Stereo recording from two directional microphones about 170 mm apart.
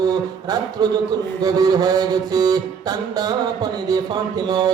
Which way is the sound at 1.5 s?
20° right (ahead or behind).